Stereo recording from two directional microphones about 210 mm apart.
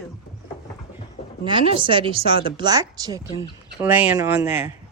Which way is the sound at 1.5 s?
25° right (ahead or behind).